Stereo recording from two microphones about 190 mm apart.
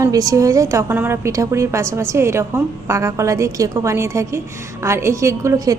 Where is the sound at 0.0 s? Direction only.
20° right (ahead or behind).